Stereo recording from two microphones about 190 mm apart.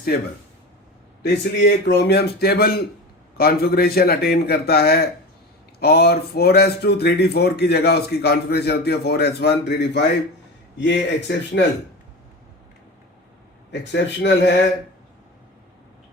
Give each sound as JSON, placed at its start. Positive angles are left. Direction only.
{"t": 1.2, "sound": "speech", "side_deg": 65}
{"t": 13.7, "sound": "speech", "side_deg": 65}